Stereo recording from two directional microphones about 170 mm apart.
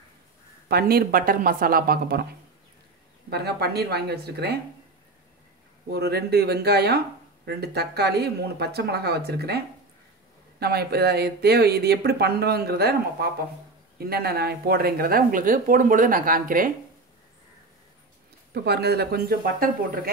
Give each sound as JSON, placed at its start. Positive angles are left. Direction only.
{"t": 0.7, "sound": "speech", "side_deg": -65}
{"t": 3.3, "sound": "speech", "side_deg": -70}
{"t": 5.9, "sound": "speech", "side_deg": -70}
{"t": 10.6, "sound": "speech", "side_deg": -70}
{"t": 18.5, "sound": "speech", "side_deg": -70}